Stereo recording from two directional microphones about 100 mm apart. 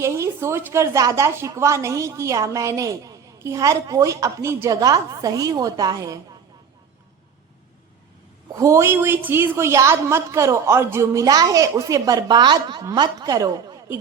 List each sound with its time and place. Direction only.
0.0 s a woman's voice: 30° right (ahead or behind)
8.5 s a woman's voice: 30° right (ahead or behind)